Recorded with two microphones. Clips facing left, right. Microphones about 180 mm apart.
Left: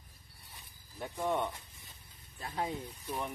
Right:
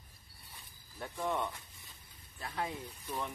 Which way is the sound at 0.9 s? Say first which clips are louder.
Left 2 dB; 15° left (ahead or behind).